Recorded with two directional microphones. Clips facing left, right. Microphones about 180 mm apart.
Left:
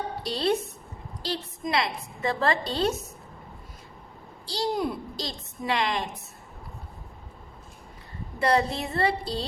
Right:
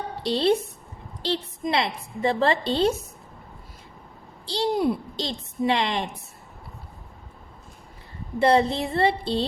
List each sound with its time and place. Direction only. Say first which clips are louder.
0.2 s a woman's voice: right 5 dB; 30° right (ahead or behind)
4.4 s a woman's voice: right 5 dB; 25° right (ahead or behind)
8.4 s a woman's voice: right 4 dB; 25° right (ahead or behind)